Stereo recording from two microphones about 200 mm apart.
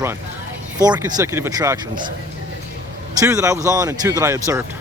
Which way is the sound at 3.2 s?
15° right (ahead or behind).